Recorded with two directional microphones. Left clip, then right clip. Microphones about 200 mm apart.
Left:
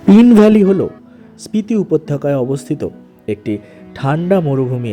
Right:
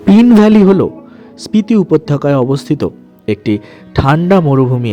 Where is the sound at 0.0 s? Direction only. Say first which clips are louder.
Even; 25° right (ahead or behind).